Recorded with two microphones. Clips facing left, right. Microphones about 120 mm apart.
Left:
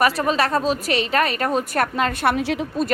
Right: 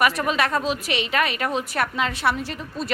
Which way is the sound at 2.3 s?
75° left (ahead or behind).